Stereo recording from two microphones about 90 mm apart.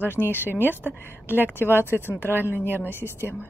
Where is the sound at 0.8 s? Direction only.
25° left (ahead or behind).